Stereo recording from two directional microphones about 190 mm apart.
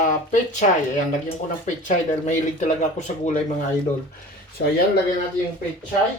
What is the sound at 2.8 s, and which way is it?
Speech, 40° left (ahead or behind).